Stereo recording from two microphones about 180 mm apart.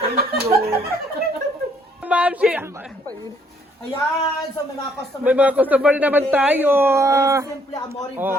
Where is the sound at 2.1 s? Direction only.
5° right (ahead or behind).